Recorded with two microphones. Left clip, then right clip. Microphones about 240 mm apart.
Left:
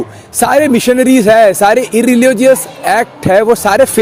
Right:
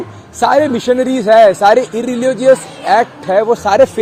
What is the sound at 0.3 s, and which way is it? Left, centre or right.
Speech, left.